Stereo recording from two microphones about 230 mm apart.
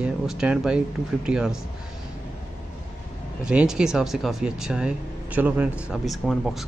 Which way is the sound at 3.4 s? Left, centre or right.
Centre.